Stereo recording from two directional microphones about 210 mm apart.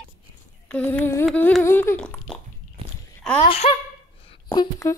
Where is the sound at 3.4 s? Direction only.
25° left (ahead or behind).